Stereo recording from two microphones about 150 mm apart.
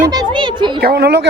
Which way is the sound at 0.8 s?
90° right.